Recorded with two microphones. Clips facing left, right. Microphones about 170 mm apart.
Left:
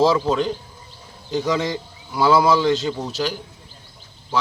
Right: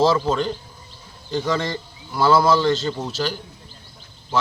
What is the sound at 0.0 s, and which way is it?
A man's voice, 10° left (ahead or behind).